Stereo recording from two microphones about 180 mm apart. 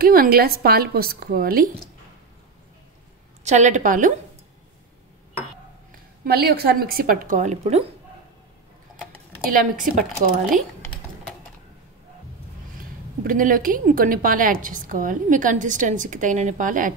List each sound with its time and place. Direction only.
0.0 s a woman's voice: 55° right (ahead or behind)
3.4 s a woman's voice: 40° right (ahead or behind)
6.2 s a woman's voice: 60° right (ahead or behind); by 7.8 s 40° right (ahead or behind)
9.5 s a woman's voice: 50° right (ahead or behind)
13.2 s a woman's voice: 50° right (ahead or behind)